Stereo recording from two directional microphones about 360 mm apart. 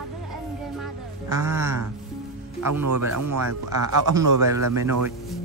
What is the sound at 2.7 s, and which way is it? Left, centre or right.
Speech, right.